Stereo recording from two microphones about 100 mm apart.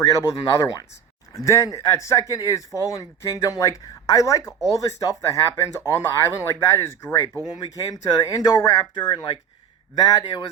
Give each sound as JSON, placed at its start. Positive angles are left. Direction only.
{"t": 0.1, "sound": "speech", "side_deg": 30}